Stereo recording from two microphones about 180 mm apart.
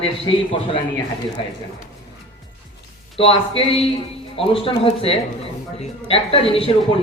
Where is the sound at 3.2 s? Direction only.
30° left (ahead or behind).